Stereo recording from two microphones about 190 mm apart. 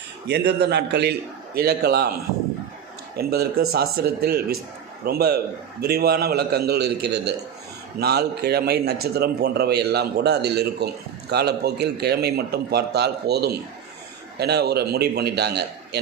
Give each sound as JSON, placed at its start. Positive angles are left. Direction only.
{"t": 0.3, "sound": "a man's voice", "side_deg": -60}
{"t": 3.2, "sound": "a man's voice", "side_deg": -55}